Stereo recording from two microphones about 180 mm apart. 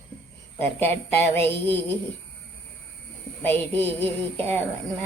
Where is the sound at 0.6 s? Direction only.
10° left (ahead or behind).